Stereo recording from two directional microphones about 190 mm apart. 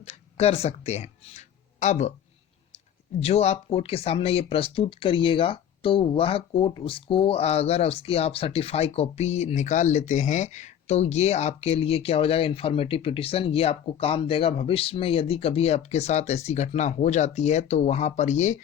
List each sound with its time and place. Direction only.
0.0 s speech: 35° left (ahead or behind)
3.2 s speech: 35° left (ahead or behind)